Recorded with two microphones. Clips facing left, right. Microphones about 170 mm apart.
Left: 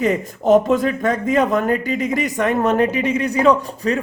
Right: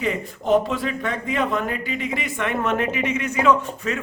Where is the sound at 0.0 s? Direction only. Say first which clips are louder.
Left 7 dB; 45° left (ahead or behind).